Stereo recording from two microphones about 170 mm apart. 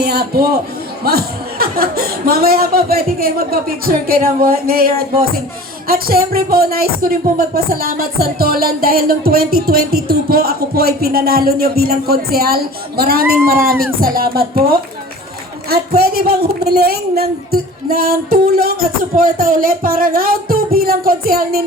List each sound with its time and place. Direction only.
0.0 s a man's voice: 65° right (ahead or behind)